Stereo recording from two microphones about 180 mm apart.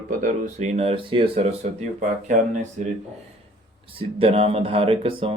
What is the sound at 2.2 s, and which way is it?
Speech, 45° right (ahead or behind).